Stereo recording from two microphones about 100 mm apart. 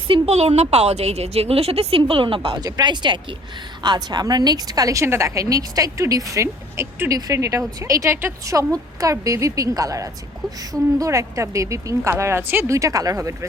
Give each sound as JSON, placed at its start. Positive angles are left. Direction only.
{"t": 0.1, "sound": "a woman's voice", "side_deg": -90}
{"t": 2.6, "sound": "a woman's voice", "side_deg": -45}
{"t": 12.7, "sound": "a woman's voice", "side_deg": -35}